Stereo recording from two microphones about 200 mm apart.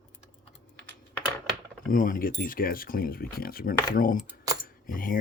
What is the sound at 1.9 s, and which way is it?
Speech, 45° left (ahead or behind).